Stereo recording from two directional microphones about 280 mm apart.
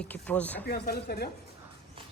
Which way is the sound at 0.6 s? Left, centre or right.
Left.